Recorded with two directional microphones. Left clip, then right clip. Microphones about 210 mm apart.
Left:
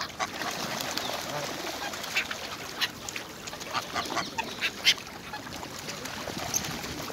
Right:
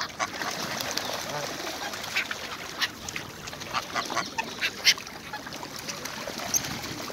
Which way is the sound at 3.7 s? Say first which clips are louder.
Right 2 dB; 25° right (ahead or behind).